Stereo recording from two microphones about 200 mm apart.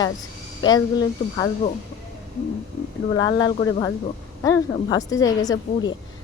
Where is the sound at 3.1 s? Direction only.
20° left (ahead or behind).